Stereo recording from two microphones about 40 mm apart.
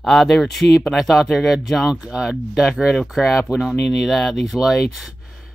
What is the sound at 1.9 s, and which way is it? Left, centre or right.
Speech, right.